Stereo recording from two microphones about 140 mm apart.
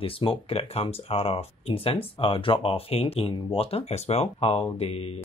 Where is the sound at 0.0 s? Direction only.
40° left (ahead or behind).